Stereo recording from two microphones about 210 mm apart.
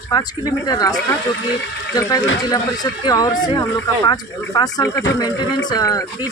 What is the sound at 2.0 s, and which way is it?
Speech, 15° left (ahead or behind).